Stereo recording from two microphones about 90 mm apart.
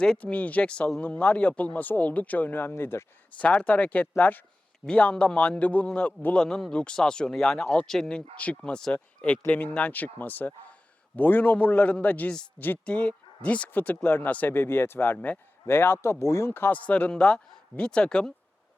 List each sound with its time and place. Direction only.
0.0 s speech: 10° left (ahead or behind)
3.3 s speech: 15° left (ahead or behind); by 16.5 s 30° left (ahead or behind)
16.5 s speech: 20° left (ahead or behind)